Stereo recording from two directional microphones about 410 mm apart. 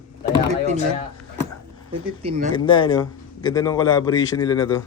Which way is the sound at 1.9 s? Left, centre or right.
Centre.